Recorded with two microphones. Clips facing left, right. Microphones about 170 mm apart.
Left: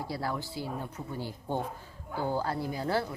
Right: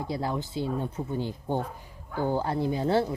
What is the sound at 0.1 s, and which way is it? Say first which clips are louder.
Speech: right 5 dB; 20° right (ahead or behind).